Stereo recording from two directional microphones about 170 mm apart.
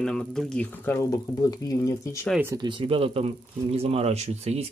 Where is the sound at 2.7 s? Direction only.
30° right (ahead or behind).